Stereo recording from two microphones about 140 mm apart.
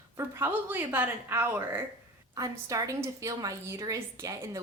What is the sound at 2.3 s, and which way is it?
A woman's voice, 25° right (ahead or behind).